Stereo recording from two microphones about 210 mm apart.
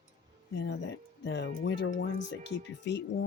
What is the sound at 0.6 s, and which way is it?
Speech, 60° left (ahead or behind).